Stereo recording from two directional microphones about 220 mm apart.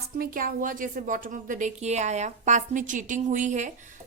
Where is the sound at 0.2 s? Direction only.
40° right (ahead or behind).